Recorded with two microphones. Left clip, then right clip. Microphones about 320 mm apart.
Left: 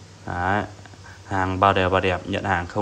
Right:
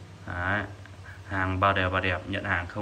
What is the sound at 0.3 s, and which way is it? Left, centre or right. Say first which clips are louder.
Speech: left 6 dB; centre.